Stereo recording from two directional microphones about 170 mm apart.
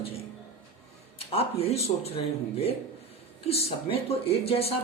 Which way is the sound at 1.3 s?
35° left (ahead or behind).